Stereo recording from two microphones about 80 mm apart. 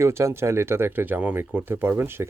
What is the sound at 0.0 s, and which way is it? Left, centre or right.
Speech, right.